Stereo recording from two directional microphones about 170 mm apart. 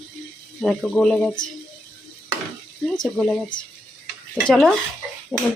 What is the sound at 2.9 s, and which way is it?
Speech, 5° left (ahead or behind).